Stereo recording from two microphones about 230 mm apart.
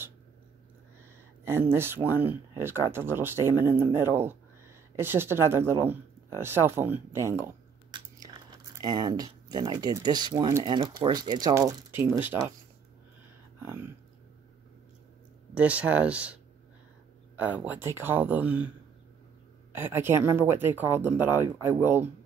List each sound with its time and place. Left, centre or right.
1.4 s speech: centre
15.5 s speech: centre
17.4 s speech: centre
19.7 s speech: centre